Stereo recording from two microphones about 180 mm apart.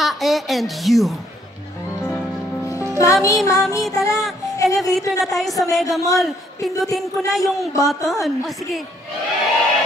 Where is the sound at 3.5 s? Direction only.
20° left (ahead or behind).